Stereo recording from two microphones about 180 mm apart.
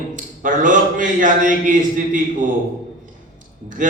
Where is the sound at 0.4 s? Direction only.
45° right (ahead or behind).